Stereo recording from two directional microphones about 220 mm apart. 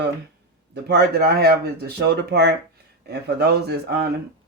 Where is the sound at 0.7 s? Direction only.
45° right (ahead or behind).